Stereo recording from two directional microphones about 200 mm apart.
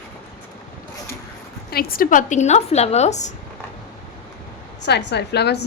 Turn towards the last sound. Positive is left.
turn(degrees=55)  # may be behind; listen again after turning